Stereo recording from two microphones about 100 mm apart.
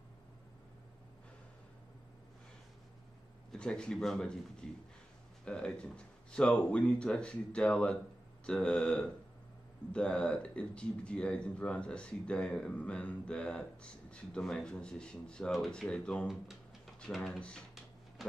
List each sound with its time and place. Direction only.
3.5 s speech: 10° left (ahead or behind)
16.3 s a sound: centre (ahead or behind)
17.0 s speech: 5° left (ahead or behind)